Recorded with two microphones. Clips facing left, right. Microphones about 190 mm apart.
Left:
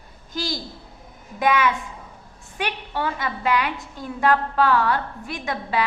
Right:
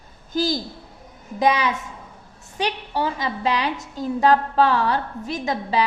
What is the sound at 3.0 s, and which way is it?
A woman's voice, 20° right (ahead or behind).